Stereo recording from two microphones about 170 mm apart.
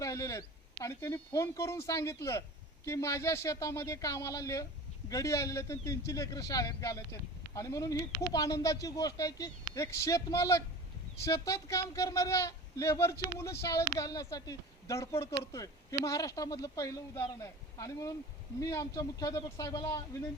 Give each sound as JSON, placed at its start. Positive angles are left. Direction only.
{"t": 0.0, "sound": "speech", "side_deg": 20}